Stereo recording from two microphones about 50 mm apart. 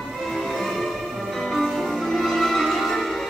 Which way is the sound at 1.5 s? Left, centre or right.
Centre.